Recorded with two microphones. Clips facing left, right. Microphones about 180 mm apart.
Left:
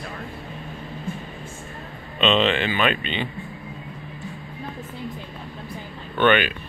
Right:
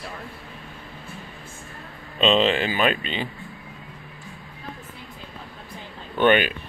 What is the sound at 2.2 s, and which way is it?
Speech, 35° right (ahead or behind).